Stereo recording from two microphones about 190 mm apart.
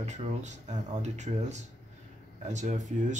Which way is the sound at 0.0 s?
35° right (ahead or behind).